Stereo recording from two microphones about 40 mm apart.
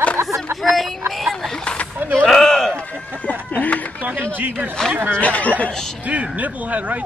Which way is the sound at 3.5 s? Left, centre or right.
Left.